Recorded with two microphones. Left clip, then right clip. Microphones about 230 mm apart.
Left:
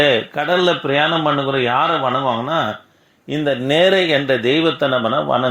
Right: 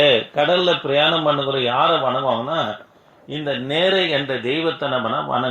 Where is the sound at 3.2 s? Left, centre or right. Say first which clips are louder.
Left 6 dB; left.